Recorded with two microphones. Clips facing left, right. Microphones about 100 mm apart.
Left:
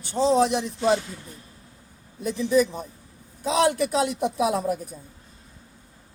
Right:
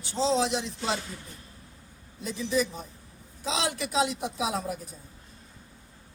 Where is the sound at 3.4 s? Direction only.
55° left (ahead or behind).